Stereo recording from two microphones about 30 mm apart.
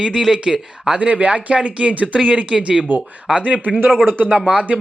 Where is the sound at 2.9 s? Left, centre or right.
Right.